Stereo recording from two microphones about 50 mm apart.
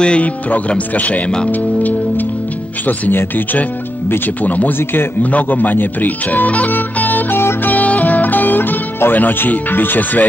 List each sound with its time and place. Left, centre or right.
0.0 s speech: left
0.5 s speech: left
7.6 s music: left